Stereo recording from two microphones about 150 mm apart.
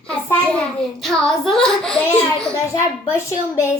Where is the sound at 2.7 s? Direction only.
20° left (ahead or behind).